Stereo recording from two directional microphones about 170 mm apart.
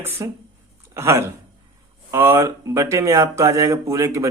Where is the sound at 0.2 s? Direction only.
20° right (ahead or behind).